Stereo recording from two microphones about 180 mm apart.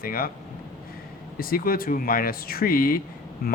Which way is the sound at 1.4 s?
55° left (ahead or behind).